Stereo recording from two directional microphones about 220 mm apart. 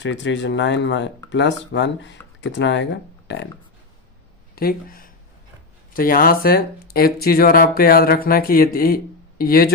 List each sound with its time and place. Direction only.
0.0 s speech: 55° left (ahead or behind)
4.5 s speech: 40° left (ahead or behind)